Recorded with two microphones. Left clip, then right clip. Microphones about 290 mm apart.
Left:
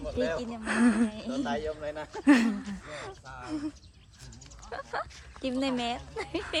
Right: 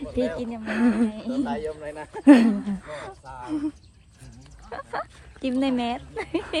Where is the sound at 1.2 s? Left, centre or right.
Right.